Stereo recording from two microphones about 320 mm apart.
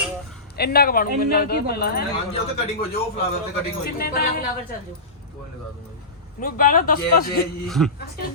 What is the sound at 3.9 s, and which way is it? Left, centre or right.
Speech, left.